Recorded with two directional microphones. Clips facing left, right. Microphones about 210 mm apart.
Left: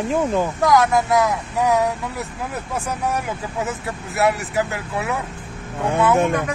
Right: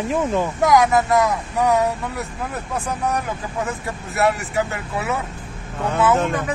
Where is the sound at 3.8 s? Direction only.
Centre (ahead or behind).